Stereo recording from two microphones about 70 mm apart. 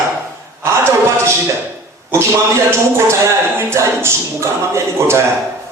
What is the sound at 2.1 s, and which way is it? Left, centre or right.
Speech, right.